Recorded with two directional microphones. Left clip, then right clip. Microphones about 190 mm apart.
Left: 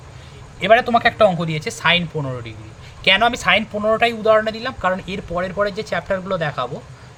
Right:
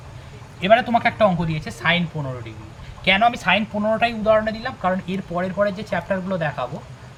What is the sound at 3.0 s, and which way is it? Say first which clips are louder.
Speech: left 2 dB; 60° left (ahead or behind).